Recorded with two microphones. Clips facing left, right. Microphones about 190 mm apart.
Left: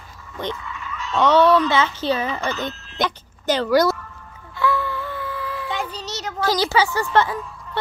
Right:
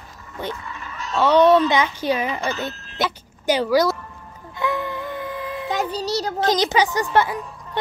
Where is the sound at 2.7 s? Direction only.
50° right (ahead or behind).